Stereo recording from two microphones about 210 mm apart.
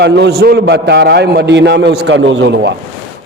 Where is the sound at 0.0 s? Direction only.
50° right (ahead or behind).